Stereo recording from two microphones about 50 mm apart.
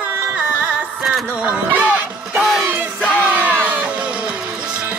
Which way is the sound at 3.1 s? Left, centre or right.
Right.